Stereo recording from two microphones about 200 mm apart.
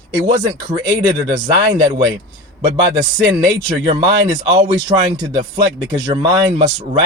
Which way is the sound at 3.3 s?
20° right (ahead or behind).